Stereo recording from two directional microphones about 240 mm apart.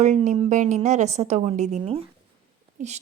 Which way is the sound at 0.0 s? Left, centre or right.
Right.